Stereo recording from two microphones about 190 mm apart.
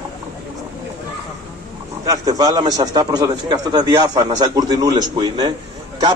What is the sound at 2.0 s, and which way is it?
A man's voice, 20° right (ahead or behind).